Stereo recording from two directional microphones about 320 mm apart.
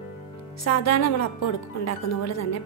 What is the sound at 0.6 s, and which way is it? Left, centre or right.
A woman's voice, left.